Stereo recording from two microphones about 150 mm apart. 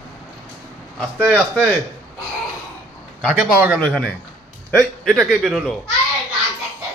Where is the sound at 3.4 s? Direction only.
Centre (ahead or behind).